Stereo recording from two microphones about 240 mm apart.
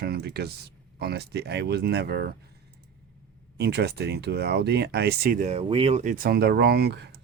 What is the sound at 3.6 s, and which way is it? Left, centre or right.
Speech, right.